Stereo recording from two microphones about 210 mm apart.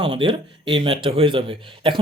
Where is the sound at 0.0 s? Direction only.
20° right (ahead or behind).